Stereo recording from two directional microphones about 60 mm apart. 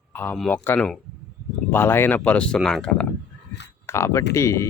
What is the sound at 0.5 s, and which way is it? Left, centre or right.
Speech, left.